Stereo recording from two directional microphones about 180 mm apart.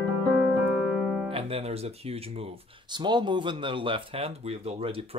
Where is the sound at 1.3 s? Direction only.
30° right (ahead or behind).